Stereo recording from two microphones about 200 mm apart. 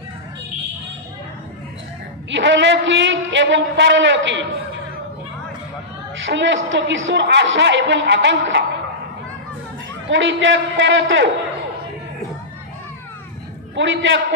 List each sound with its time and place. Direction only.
2.3 s a woman's voice: 65° right (ahead or behind)
6.2 s a woman's voice: 70° right (ahead or behind)
10.0 s a woman's voice: 65° right (ahead or behind)
13.7 s a woman's voice: 65° right (ahead or behind)